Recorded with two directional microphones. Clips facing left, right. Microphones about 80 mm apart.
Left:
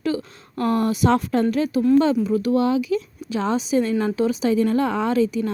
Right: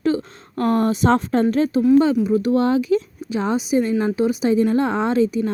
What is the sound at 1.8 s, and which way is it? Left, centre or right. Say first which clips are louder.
Speech: right 1 dB; centre.